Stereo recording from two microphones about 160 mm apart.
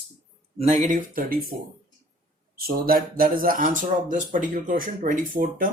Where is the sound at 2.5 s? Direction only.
70° right (ahead or behind).